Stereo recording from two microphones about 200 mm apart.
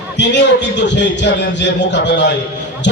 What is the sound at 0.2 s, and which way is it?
A man's voice, 60° left (ahead or behind).